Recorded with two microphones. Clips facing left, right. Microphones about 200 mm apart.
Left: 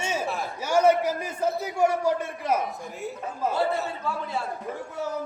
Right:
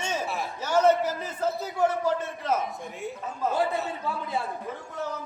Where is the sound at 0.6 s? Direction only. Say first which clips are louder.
Left 1 dB; 10° left (ahead or behind).